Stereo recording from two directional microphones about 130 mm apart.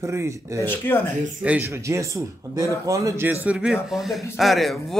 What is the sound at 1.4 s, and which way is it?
A man's voice, 10° right (ahead or behind).